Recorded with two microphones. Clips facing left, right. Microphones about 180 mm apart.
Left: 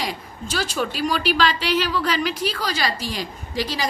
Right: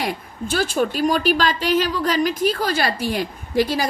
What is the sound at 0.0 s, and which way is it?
A woman's voice, 55° right (ahead or behind).